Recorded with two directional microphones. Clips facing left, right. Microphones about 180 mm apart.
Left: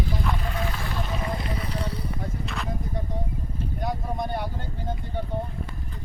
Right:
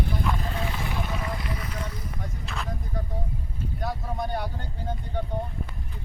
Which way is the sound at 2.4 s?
Centre (ahead or behind).